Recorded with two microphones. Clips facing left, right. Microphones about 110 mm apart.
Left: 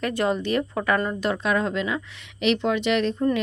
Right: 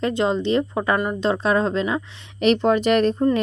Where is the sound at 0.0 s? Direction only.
20° right (ahead or behind).